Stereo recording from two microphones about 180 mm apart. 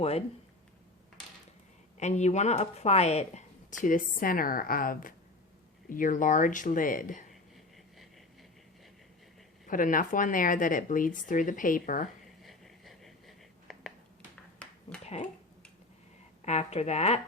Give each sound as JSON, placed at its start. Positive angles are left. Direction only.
{"t": 0.0, "sound": "a woman's voice", "side_deg": 35}
{"t": 2.0, "sound": "speech", "side_deg": 40}
{"t": 3.8, "sound": "speech", "side_deg": 50}
{"t": 9.6, "sound": "speech", "side_deg": 50}
{"t": 12.4, "sound": "a sound", "side_deg": 0}
{"t": 14.6, "sound": "finger snapping", "side_deg": 5}
{"t": 15.0, "sound": "speech", "side_deg": 35}
{"t": 16.4, "sound": "a woman's voice", "side_deg": 40}